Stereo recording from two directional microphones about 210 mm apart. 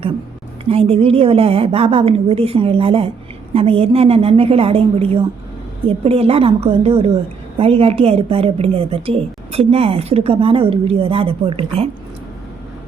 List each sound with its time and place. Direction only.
0.6 s a woman's voice: 25° right (ahead or behind)